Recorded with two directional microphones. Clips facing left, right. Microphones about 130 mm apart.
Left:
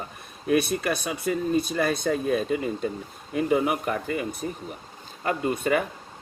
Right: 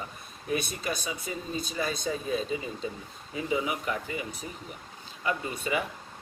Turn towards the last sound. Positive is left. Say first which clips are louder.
# left 7 dB
turn(degrees=50)  # may be behind; listen again after turning